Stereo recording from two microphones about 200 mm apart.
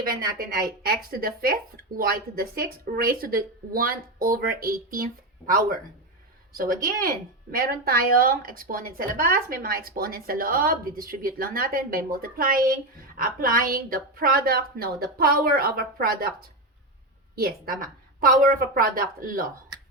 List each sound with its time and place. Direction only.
0.0 s a woman's voice: 45° right (ahead or behind)